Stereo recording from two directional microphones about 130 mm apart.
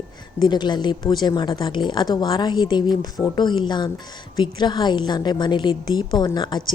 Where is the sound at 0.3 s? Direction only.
35° left (ahead or behind).